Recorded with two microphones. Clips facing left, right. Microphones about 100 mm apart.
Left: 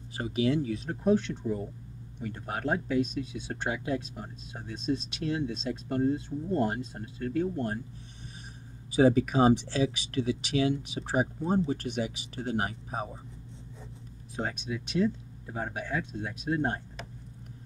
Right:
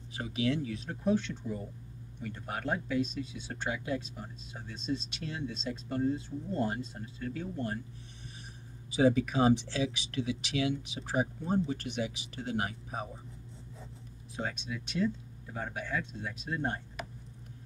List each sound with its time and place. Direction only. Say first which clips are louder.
0.1 s speech: left 4 dB; 40° left (ahead or behind)
8.9 s speech: left 4 dB; 45° left (ahead or behind)
14.4 s speech: left 3 dB; 40° left (ahead or behind)
16.0 s speech: left 4 dB; 50° left (ahead or behind)